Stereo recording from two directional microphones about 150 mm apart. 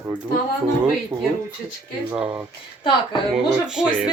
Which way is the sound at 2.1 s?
10° right (ahead or behind).